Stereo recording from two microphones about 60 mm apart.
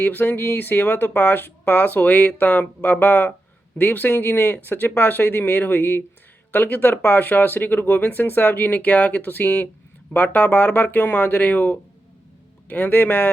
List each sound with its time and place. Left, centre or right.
0.0 s speech: left